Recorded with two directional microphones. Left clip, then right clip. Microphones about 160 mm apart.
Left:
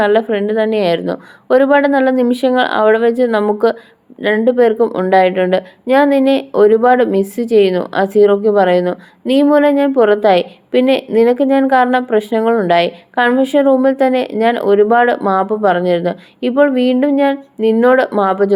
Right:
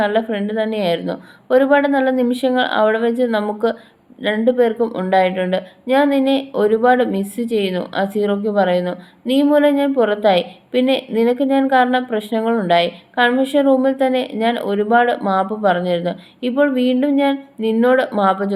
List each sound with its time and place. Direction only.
0.0 s speech: 45° left (ahead or behind)